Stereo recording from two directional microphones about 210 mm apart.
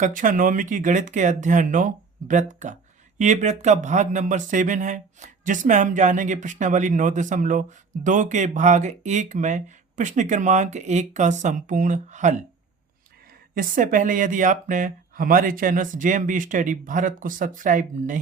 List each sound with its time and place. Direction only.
0.0 s speech: 40° right (ahead or behind)
13.6 s speech: 40° right (ahead or behind)